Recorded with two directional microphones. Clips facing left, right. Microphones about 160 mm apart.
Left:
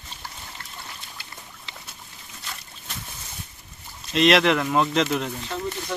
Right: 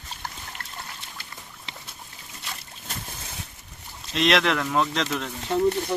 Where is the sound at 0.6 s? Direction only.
55° right (ahead or behind).